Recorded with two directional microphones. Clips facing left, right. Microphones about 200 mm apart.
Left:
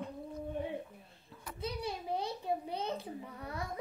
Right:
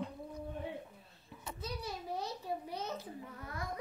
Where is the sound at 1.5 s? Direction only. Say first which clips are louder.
Left 5 dB; 25° left (ahead or behind).